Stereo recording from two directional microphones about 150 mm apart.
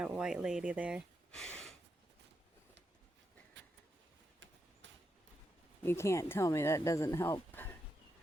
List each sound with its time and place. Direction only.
0.0 s speech: 5° right (ahead or behind)
1.3 s a sound: 5° left (ahead or behind)
5.8 s speech: 15° left (ahead or behind)